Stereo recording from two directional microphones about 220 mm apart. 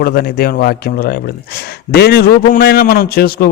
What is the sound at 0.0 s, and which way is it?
Speech, 45° left (ahead or behind).